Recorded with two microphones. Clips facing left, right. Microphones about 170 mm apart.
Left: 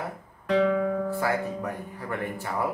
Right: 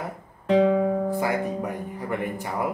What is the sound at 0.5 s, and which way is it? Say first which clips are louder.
Speech: right 4 dB; 20° right (ahead or behind).